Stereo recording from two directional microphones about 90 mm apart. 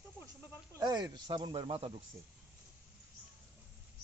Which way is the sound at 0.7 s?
45° right (ahead or behind).